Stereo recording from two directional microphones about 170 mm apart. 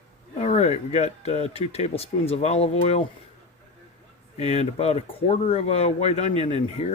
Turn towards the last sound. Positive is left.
turn(degrees=40)  # may be behind; listen again after turning